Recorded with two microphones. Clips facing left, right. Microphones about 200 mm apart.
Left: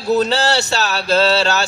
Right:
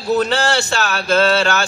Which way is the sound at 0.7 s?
35° left (ahead or behind).